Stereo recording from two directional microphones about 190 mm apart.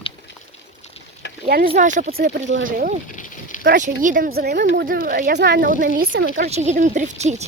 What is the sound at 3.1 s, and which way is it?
Snake, 45° left (ahead or behind).